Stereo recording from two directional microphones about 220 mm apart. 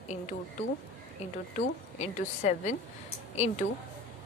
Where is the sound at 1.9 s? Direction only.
30° left (ahead or behind).